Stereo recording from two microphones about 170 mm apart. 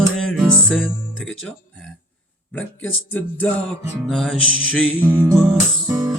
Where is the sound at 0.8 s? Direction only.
5° left (ahead or behind).